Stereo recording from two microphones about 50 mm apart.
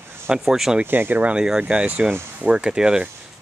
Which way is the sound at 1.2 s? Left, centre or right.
Centre.